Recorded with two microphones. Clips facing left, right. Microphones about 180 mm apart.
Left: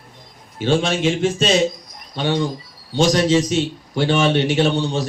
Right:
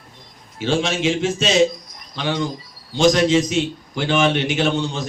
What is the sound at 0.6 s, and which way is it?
Speech, 55° left (ahead or behind).